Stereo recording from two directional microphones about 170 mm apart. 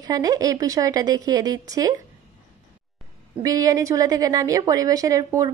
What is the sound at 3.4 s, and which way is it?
A woman's voice, 20° right (ahead or behind).